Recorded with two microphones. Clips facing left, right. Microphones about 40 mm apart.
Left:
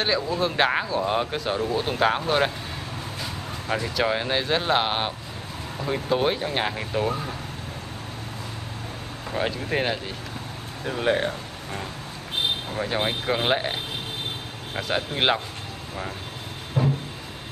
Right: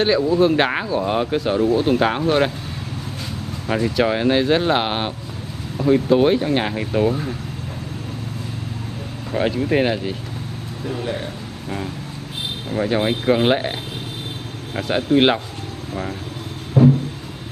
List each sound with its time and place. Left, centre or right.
0.0 s speech: centre
3.6 s speech: centre
9.3 s speech: centre
11.0 s speech: left
12.7 s speech: centre
14.8 s speech: centre
16.8 s a sound: centre